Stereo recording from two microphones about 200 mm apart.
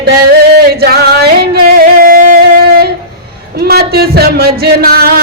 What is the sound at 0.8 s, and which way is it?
Music, 50° right (ahead or behind).